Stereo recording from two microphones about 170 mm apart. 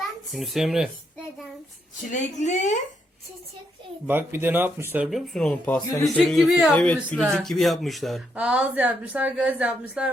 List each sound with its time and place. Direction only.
0.3 s speech: centre (ahead or behind)
2.0 s a woman's voice: 45° left (ahead or behind)
4.0 s speech: 10° right (ahead or behind)
5.1 s speech: centre (ahead or behind)